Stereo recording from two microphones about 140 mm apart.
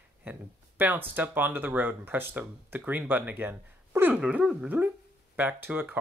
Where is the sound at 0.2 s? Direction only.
10° right (ahead or behind).